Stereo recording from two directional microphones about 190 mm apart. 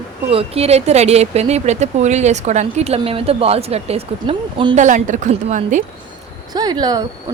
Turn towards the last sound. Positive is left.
turn(degrees=-20)  # may be behind; listen again after turning